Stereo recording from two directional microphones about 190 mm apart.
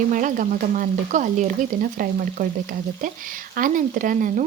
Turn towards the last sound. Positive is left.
turn(degrees=-45)  # may be behind; listen again after turning